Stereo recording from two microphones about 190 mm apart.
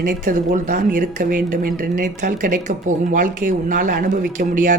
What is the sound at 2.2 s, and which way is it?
Speech, 40° right (ahead or behind).